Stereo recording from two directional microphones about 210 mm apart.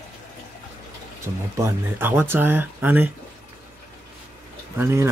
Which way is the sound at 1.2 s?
10° right (ahead or behind).